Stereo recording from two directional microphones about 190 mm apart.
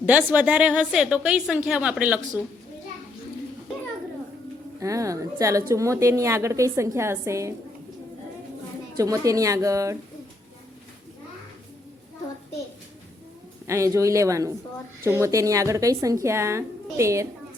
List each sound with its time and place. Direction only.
0.0 s a woman's voice: 10° right (ahead or behind)
4.8 s a woman's voice: 15° right (ahead or behind)
9.0 s a woman's voice: 15° right (ahead or behind)
13.7 s a woman's voice: 15° right (ahead or behind)